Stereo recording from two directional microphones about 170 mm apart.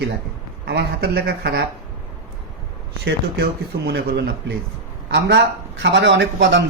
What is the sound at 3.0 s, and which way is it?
Speech, 75° right (ahead or behind).